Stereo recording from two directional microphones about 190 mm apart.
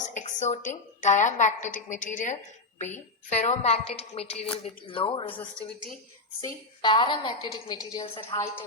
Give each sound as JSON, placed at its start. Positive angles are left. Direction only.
{"t": 0.0, "sound": "a woman's voice", "side_deg": 40}
{"t": 6.4, "sound": "a woman's voice", "side_deg": 25}